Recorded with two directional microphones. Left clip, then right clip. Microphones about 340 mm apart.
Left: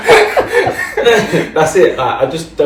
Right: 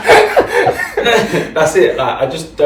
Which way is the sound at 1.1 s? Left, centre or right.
Centre.